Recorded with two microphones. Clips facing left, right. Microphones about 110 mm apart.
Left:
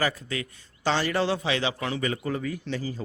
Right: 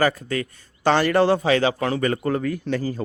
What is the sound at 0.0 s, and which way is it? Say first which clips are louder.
A man's voice: right 7 dB; 50° right (ahead or behind).